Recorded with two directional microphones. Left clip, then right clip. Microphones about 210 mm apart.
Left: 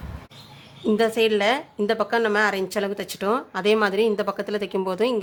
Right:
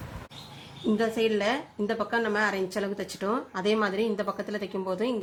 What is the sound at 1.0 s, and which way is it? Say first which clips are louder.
A woman's voice: left 6 dB; 25° left (ahead or behind).